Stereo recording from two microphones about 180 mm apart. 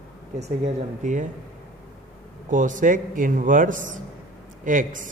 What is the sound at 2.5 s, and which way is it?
Speech, 45° right (ahead or behind).